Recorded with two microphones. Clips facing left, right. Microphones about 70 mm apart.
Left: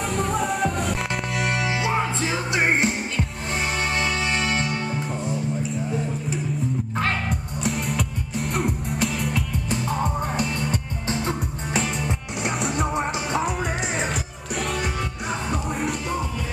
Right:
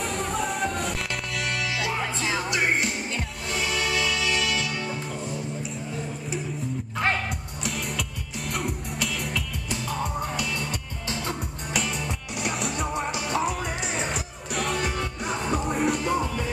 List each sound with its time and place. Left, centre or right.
0.0 s music: centre
1.3 s music: left
1.7 s music: left
8.4 s music: centre
8.9 s music: left
9.3 s music: left
12.6 s music: centre
12.9 s music: left
14.0 s music: centre